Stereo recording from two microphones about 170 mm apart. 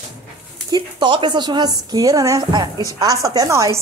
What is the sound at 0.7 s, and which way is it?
A woman's voice, 25° right (ahead or behind).